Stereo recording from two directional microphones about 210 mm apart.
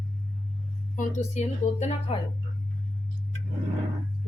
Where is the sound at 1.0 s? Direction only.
35° left (ahead or behind).